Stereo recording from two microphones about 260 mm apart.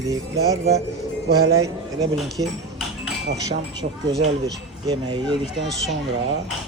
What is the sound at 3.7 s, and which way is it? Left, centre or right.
Speech, centre.